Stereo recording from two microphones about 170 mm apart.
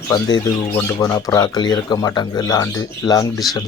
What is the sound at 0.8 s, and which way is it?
Speech, 20° left (ahead or behind).